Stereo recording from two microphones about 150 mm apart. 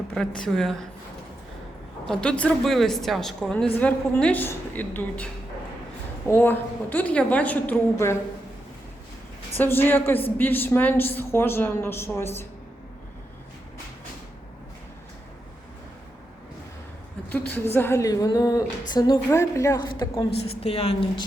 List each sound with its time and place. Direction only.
0.4 s a woman's voice: centre (ahead or behind)
2.0 s a woman's voice: 5° left (ahead or behind)
9.6 s a woman's voice: 15° left (ahead or behind)
17.2 s a woman's voice: 15° left (ahead or behind)
20.5 s a woman's voice: 40° left (ahead or behind)